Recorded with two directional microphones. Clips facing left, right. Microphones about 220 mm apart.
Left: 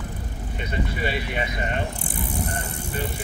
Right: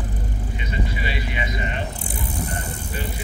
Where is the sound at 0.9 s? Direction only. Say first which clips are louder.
Left 2 dB; 50° left (ahead or behind).